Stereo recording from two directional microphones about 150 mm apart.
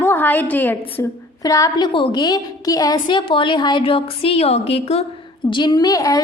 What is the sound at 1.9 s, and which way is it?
A woman's voice, 35° left (ahead or behind).